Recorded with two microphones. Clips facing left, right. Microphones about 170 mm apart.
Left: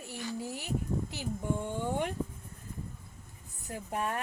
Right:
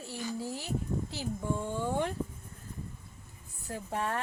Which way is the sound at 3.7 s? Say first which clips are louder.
Right 1 dB; 15° left (ahead or behind).